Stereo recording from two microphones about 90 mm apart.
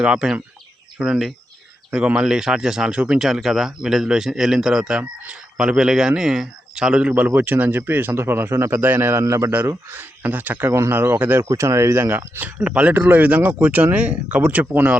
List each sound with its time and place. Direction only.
0.0 s speech: 10° right (ahead or behind)
7.1 s speech: 20° right (ahead or behind)